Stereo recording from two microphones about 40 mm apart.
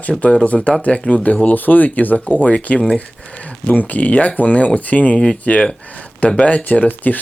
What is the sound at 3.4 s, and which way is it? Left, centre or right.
Speech, left.